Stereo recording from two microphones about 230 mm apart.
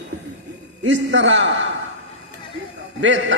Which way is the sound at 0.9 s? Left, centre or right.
Right.